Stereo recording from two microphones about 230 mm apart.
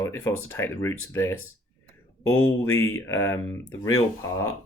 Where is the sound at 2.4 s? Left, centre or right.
Centre.